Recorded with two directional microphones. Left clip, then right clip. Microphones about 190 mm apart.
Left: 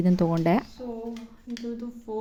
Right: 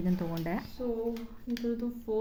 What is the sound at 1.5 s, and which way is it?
Speech, 5° right (ahead or behind).